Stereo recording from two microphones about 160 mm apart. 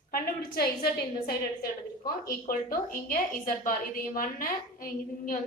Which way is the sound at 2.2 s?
60° left (ahead or behind).